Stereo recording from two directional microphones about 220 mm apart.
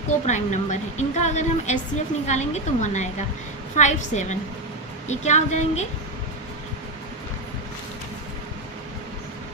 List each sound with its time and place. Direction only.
0.3 s a woman's voice: 35° left (ahead or behind)